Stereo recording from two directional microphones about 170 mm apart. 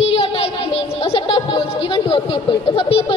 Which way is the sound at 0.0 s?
35° left (ahead or behind).